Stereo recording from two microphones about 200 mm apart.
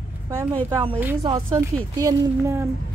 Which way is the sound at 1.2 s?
20° right (ahead or behind).